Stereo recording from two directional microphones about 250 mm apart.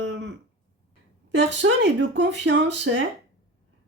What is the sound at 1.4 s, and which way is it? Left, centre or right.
Speech, right.